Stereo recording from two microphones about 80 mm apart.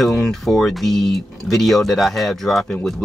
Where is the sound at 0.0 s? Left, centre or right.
Centre.